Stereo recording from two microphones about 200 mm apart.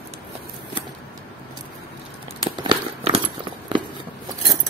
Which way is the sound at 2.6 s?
25° right (ahead or behind).